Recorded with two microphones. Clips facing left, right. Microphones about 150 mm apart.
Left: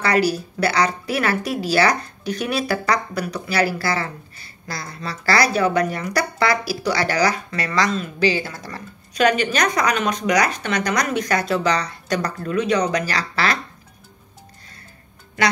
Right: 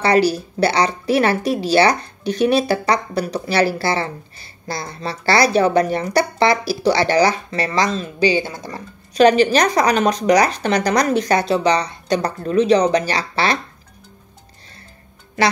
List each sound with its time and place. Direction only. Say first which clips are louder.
0.0 s speech: right 4 dB; 25° right (ahead or behind)